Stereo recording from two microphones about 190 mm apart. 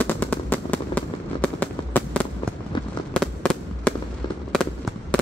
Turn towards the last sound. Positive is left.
turn(degrees=5)  # may be behind; listen again after turning